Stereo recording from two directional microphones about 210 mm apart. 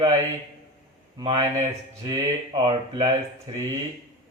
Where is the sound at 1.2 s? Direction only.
25° right (ahead or behind).